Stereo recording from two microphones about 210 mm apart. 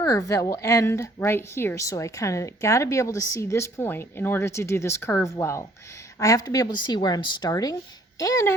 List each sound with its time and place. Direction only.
0.0 s a woman's voice: 15° left (ahead or behind)